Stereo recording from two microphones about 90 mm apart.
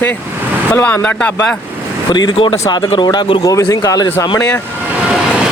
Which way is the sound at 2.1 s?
55° left (ahead or behind).